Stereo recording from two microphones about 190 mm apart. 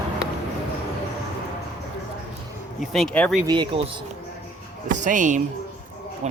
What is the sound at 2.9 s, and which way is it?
Speech, 5° left (ahead or behind).